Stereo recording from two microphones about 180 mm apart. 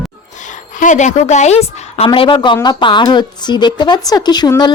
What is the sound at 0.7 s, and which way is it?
Speech, 45° left (ahead or behind).